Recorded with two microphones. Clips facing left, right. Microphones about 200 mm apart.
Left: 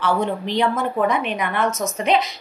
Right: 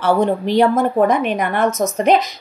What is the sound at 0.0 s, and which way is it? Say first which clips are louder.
A woman's voice: right 6 dB; 45° right (ahead or behind).